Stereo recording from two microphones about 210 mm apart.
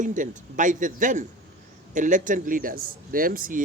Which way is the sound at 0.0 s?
40° right (ahead or behind).